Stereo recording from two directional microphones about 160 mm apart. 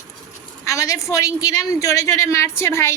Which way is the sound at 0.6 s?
20° left (ahead or behind).